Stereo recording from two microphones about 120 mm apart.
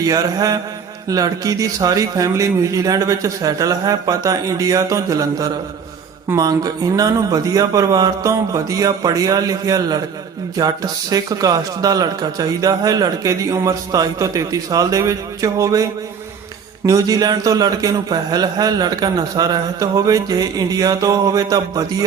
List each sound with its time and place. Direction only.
0.0 s speech: 30° right (ahead or behind)